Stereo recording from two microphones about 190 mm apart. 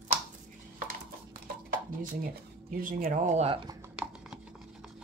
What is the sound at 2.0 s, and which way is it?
Speech, 45° right (ahead or behind).